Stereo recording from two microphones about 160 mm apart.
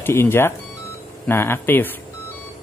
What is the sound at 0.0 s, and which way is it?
Speech, 15° left (ahead or behind).